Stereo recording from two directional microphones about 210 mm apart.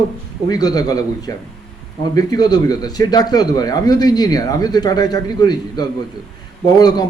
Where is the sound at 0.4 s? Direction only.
20° left (ahead or behind).